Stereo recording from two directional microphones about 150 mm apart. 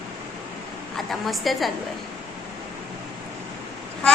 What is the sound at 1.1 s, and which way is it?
Speech, centre (ahead or behind).